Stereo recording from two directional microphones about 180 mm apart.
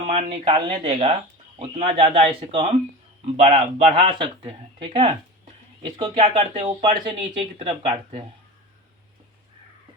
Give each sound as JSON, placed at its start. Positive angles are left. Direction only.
{"t": 0.1, "sound": "speech", "side_deg": -30}